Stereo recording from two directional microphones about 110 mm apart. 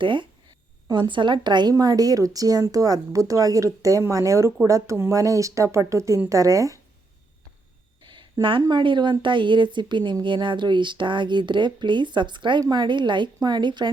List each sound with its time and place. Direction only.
0.0 s a woman's voice: 45° right (ahead or behind); by 6.7 s 30° right (ahead or behind)
8.0 s a sound: 45° right (ahead or behind)
8.6 s a woman's voice: 45° right (ahead or behind)